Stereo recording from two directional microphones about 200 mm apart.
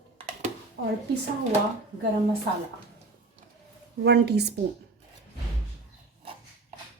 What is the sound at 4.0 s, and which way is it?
Speech, 55° right (ahead or behind).